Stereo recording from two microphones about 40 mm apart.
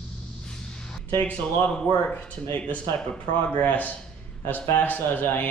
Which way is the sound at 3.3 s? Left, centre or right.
Left.